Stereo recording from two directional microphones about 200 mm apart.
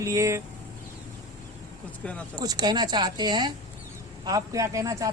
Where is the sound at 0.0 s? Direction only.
15° right (ahead or behind).